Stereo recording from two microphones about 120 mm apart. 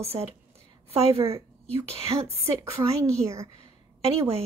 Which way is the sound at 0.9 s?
50° right (ahead or behind).